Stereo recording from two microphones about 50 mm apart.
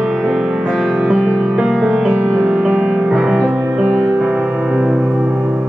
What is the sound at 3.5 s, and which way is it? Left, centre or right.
Music, right.